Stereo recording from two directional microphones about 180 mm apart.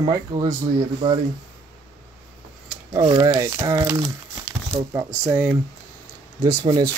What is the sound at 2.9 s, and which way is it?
Speech, 25° right (ahead or behind).